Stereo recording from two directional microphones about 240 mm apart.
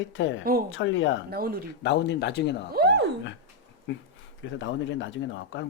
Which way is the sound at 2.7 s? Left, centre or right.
Right.